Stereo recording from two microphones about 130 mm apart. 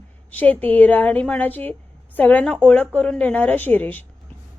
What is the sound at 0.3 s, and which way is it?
A woman's voice, 10° left (ahead or behind).